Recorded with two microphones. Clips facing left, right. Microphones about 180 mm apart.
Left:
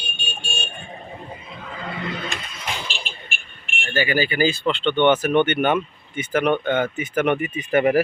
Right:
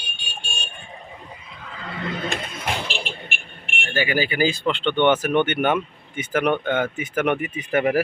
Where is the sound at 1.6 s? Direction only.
20° left (ahead or behind).